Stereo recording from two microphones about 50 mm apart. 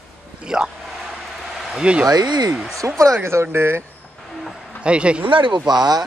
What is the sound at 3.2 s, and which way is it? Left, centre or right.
Speech, right.